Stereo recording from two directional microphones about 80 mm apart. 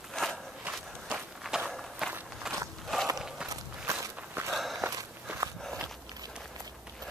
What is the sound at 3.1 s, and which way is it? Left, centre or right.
Walk, centre.